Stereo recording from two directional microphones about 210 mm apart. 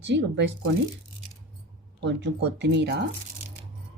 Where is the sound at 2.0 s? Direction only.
55° right (ahead or behind).